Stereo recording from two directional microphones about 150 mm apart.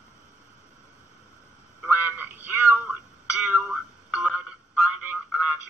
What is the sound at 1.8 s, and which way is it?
Music, 10° right (ahead or behind).